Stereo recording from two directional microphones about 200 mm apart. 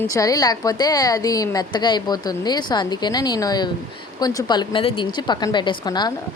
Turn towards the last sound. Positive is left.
turn(degrees=20)  # may be behind; listen again after turning